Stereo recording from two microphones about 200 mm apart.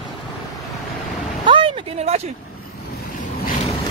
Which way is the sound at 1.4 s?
25° right (ahead or behind).